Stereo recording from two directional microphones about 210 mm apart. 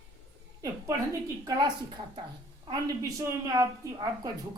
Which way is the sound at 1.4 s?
20° right (ahead or behind).